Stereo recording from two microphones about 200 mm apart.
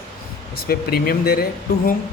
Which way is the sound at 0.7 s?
50° left (ahead or behind).